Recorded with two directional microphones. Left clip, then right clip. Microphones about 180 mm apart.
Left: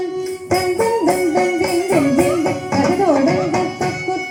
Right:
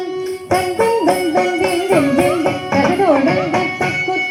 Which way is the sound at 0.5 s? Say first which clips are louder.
Right 2 dB; 30° right (ahead or behind).